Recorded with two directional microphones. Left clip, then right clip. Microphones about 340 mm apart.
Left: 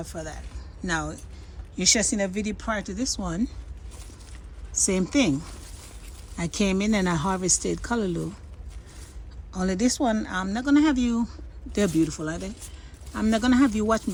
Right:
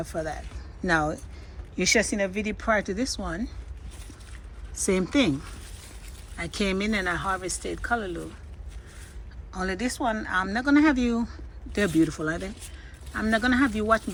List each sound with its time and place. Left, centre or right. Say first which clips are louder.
0.0 s speech: right 5 dB; centre
4.7 s speech: even; centre
6.3 s speech: left 1 dB; centre
9.5 s speech: left 3 dB; centre